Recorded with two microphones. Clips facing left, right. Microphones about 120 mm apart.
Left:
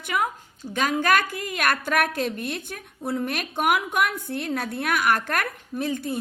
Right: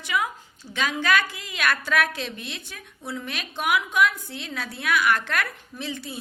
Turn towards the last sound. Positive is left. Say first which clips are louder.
# left 7 dB
turn(degrees=50)  # may be behind; listen again after turning